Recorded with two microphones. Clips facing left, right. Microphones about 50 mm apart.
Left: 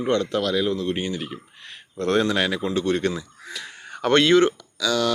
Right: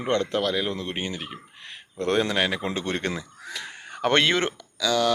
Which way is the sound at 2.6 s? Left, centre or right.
Right.